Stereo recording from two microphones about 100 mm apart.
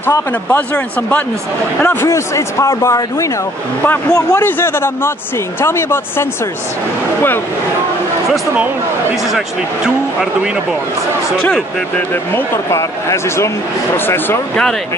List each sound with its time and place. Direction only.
0.6 s speech: 15° left (ahead or behind)
2.0 s speech: 30° left (ahead or behind)
4.5 s speech: 20° left (ahead or behind)
12.4 s speech: 30° left (ahead or behind)